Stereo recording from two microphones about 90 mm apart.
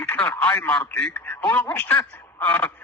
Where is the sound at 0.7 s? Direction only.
10° left (ahead or behind).